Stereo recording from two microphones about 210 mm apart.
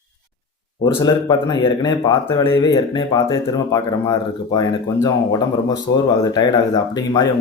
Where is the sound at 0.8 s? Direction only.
20° left (ahead or behind).